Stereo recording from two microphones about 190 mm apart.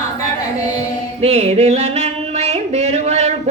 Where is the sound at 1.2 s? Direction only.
30° right (ahead or behind).